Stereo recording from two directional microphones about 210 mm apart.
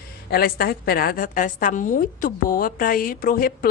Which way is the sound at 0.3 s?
45° left (ahead or behind).